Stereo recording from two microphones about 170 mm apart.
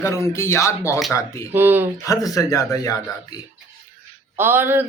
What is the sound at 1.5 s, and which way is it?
Speech, 10° right (ahead or behind).